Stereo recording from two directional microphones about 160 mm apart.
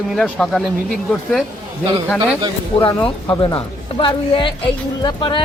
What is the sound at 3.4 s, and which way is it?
Speech, 35° left (ahead or behind).